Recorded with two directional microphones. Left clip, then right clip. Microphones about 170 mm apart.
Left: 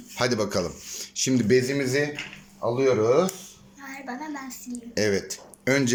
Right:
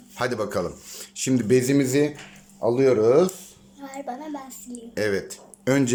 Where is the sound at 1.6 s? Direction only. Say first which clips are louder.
Right 3 dB; 20° right (ahead or behind).